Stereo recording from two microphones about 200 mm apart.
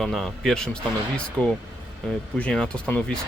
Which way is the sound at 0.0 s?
Centre (ahead or behind).